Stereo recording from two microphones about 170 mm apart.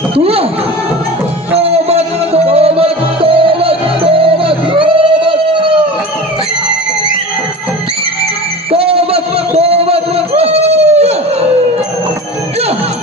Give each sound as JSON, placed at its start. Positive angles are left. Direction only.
{"t": 0.2, "sound": "speech", "side_deg": -35}
{"t": 1.5, "sound": "music", "side_deg": -35}
{"t": 8.7, "sound": "a sound", "side_deg": -35}